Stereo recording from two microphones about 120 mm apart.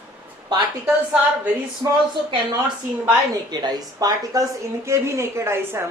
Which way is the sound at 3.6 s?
30° right (ahead or behind).